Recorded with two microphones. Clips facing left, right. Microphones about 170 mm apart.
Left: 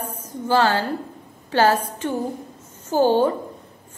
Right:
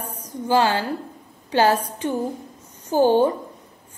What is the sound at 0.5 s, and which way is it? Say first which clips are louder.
A woman's voice: even; 15° right (ahead or behind).